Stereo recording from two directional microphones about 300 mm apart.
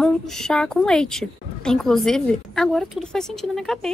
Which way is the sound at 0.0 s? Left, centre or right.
Centre.